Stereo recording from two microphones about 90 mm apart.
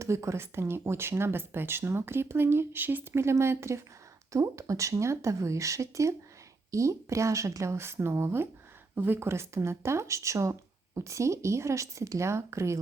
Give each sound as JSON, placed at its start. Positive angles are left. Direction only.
{"t": 0.0, "sound": "speech", "side_deg": -30}